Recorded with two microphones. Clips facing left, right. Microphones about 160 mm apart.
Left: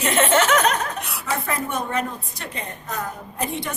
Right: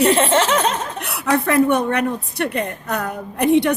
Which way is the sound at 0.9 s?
65° right (ahead or behind).